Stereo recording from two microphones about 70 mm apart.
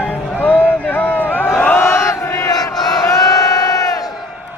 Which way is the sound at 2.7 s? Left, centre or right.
Left.